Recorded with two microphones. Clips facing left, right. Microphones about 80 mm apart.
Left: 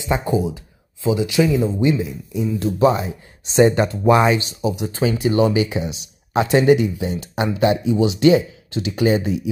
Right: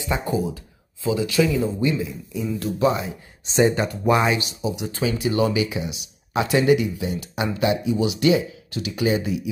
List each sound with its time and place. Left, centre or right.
0.0 s speech: left